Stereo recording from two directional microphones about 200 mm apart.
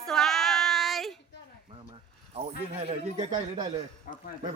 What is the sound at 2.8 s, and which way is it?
Speech, 30° right (ahead or behind).